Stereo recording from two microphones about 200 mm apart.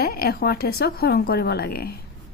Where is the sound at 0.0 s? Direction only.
50° left (ahead or behind).